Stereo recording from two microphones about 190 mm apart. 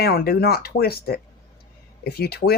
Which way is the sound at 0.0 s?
55° left (ahead or behind).